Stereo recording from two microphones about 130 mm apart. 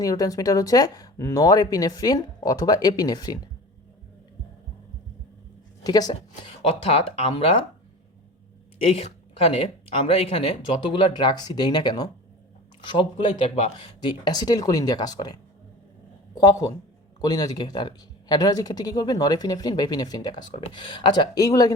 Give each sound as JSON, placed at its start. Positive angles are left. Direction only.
{"t": 0.0, "sound": "speech", "side_deg": 25}
{"t": 5.8, "sound": "speech", "side_deg": 30}
{"t": 6.6, "sound": "speech", "side_deg": 45}
{"t": 8.8, "sound": "speech", "side_deg": 50}